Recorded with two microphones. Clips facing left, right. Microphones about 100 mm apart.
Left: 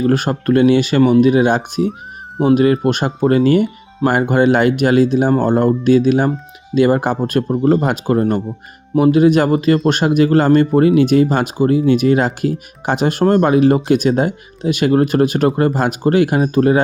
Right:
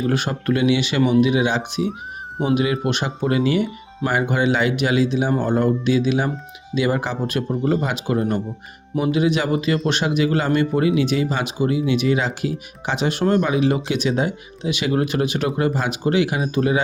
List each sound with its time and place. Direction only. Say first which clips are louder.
0.1 s speech: left 6 dB; 45° left (ahead or behind)
2.8 s speech: left 7 dB; 45° left (ahead or behind)